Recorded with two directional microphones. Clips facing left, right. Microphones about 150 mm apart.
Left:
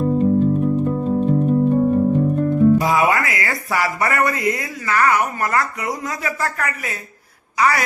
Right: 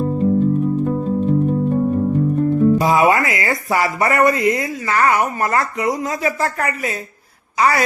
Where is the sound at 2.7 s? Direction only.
25° right (ahead or behind).